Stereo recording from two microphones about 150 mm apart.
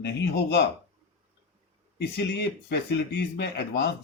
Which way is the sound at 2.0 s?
90° left.